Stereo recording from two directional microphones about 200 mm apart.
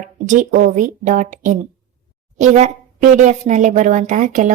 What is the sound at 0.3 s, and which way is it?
A woman's voice, 40° right (ahead or behind).